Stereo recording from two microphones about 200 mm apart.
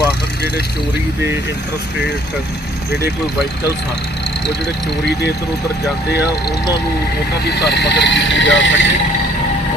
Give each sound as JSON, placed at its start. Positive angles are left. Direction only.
{"t": 7.4, "sound": "speech", "side_deg": 55}